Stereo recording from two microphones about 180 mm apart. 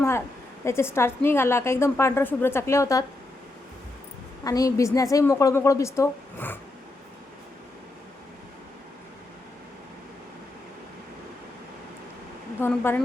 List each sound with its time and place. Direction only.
0.6 s a woman's voice: 15° left (ahead or behind)
4.4 s a woman's voice: 20° left (ahead or behind)
12.5 s speech: 10° left (ahead or behind)